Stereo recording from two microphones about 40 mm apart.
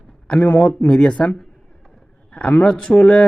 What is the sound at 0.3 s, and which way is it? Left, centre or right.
Speech, left.